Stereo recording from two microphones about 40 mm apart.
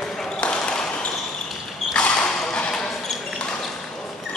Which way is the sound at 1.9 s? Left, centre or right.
Left.